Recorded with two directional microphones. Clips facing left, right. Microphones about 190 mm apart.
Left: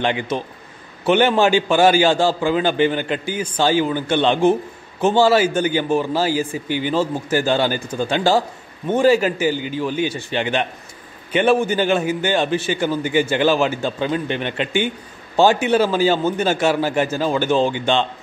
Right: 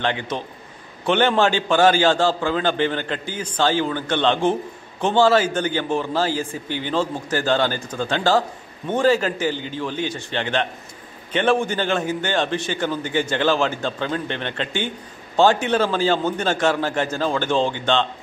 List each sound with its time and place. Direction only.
0.0 s a man's voice: 15° left (ahead or behind)